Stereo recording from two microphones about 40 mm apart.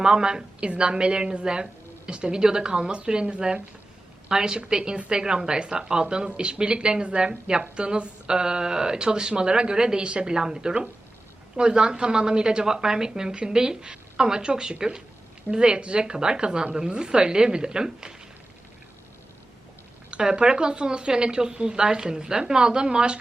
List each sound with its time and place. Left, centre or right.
0.0 s a woman's voice: centre
20.1 s a woman's voice: right